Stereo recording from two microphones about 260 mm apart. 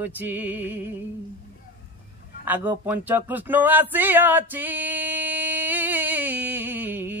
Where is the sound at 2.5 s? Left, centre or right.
Centre.